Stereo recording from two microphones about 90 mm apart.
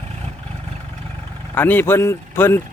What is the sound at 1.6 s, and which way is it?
Speech, 20° left (ahead or behind).